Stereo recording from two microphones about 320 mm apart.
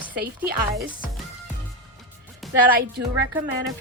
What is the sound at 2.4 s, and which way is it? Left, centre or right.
Music, centre.